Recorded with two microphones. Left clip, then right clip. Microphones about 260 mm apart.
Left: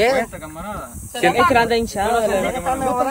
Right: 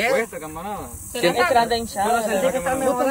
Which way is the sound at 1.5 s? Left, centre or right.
Left.